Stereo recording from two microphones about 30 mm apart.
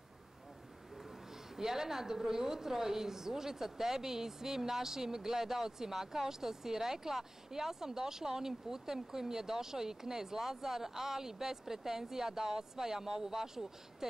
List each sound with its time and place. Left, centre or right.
1.6 s a woman's voice: centre